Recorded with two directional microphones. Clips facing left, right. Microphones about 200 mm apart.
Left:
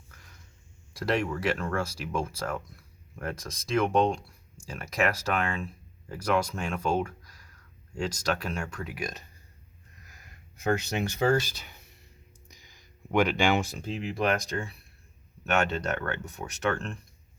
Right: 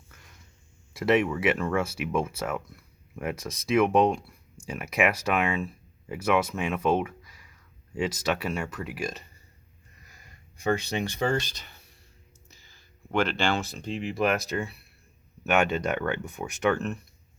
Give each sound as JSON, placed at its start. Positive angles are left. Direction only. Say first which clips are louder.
{"t": 0.9, "sound": "speech", "louder": "right 5 dB", "side_deg": -5}
{"t": 10.6, "sound": "speech", "louder": "right 1 dB", "side_deg": 5}